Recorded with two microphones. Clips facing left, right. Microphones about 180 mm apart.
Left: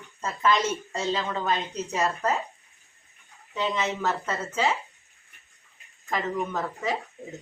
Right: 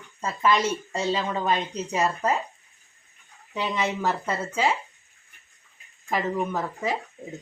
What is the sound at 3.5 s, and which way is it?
Speech, 10° right (ahead or behind).